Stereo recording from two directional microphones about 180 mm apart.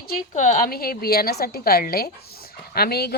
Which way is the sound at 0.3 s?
45° left (ahead or behind).